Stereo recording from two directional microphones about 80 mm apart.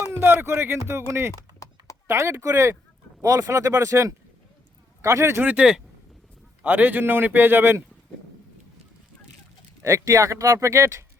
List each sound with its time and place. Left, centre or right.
0.2 s a man's voice: right
1.3 s typing: left
2.0 s speech: right
5.4 s a man's voice: centre
9.8 s speech: right